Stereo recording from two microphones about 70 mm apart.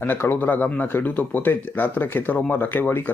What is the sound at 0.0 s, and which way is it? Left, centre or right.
Speech, left.